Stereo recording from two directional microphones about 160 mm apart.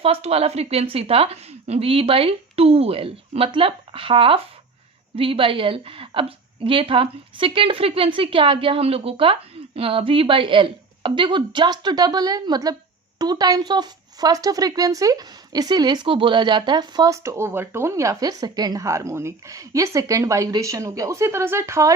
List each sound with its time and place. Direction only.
0.0 s a woman's voice: 40° right (ahead or behind); by 21.9 s 20° right (ahead or behind)